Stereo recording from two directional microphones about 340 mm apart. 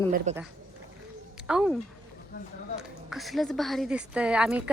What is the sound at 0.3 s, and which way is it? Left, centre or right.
Speech, centre.